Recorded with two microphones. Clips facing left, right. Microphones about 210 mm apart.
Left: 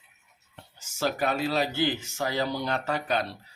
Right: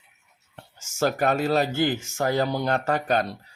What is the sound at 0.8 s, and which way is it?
Speech, 45° right (ahead or behind).